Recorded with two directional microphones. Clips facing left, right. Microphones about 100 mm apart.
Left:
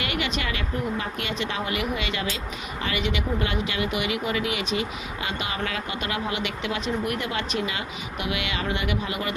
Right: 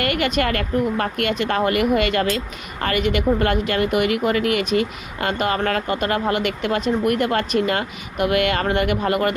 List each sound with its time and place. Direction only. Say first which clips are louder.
0.0 s speech: right 8 dB; 55° right (ahead or behind)